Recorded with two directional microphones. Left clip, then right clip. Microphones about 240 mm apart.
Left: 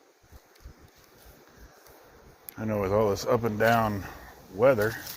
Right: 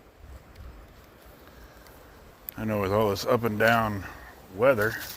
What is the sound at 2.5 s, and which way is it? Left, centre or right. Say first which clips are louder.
Speech: even; right.